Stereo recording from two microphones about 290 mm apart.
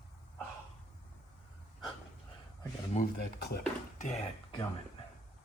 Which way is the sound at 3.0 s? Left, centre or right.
Left.